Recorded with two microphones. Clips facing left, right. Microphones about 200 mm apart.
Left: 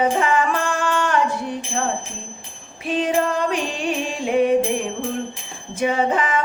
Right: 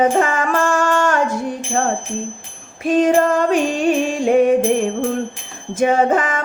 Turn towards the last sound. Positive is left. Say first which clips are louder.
# right 4 dB
turn(degrees=-45)  # may be behind; listen again after turning